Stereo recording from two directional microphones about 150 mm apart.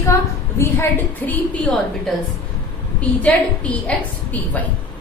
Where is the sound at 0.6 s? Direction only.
15° left (ahead or behind).